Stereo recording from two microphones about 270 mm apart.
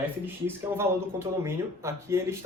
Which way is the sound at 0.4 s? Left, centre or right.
Centre.